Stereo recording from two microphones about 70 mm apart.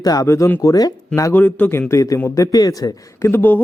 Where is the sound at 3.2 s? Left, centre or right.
Left.